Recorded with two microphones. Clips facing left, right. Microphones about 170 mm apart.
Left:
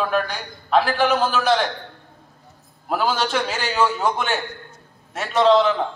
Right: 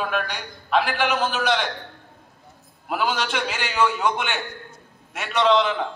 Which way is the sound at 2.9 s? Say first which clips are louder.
Left 3 dB; 35° left (ahead or behind).